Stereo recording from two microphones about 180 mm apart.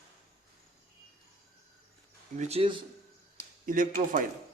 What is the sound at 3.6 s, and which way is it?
Speech, 45° right (ahead or behind).